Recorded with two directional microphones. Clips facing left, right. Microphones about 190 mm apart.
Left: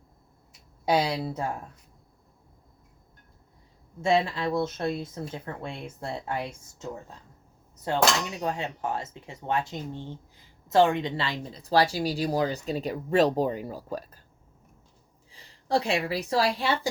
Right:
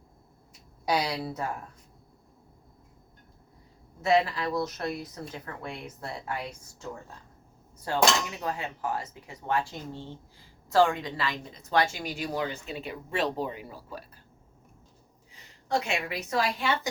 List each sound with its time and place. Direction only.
0.9 s speech: 25° left (ahead or behind)
4.0 s speech: 25° left (ahead or behind)
15.3 s a woman's voice: 30° left (ahead or behind)